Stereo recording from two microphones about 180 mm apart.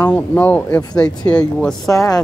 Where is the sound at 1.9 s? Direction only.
20° left (ahead or behind).